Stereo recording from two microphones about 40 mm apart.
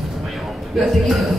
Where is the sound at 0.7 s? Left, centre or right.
Centre.